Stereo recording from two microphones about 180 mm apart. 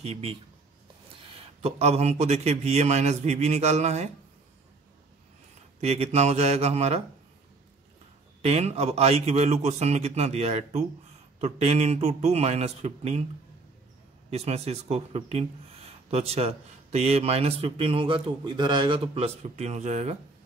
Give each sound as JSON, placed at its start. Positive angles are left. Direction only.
{"t": 0.0, "sound": "speech", "side_deg": -35}
{"t": 5.8, "sound": "speech", "side_deg": -35}
{"t": 8.4, "sound": "speech", "side_deg": -35}
{"t": 14.3, "sound": "speech", "side_deg": -35}